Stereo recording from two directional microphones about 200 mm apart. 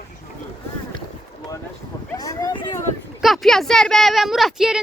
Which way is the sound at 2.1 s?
15° left (ahead or behind).